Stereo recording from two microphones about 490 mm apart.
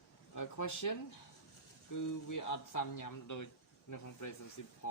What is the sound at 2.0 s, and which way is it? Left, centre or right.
Speech, left.